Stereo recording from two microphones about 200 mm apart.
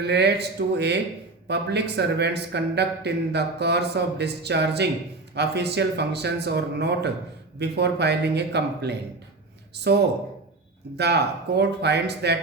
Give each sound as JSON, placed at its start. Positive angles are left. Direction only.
{"t": 0.0, "sound": "speech", "side_deg": -55}